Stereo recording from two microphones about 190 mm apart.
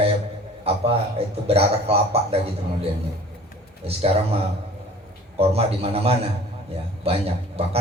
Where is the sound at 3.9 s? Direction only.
30° right (ahead or behind).